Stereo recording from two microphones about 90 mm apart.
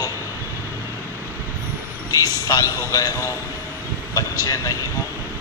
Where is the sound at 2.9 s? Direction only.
40° left (ahead or behind).